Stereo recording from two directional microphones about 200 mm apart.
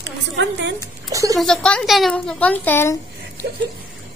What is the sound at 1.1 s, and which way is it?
Speech, 15° right (ahead or behind).